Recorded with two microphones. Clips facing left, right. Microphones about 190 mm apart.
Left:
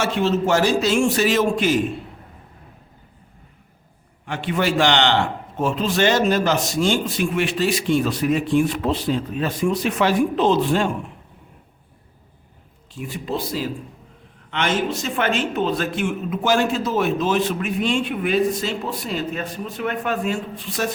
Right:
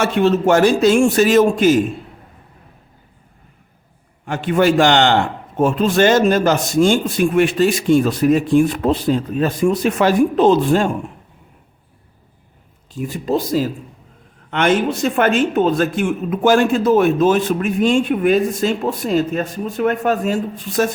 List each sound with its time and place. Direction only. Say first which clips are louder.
0.0 s a man's voice: right 5 dB; 55° right (ahead or behind)
4.3 s a man's voice: right 7 dB; 45° right (ahead or behind)
12.9 s a man's voice: right 7 dB; 40° right (ahead or behind)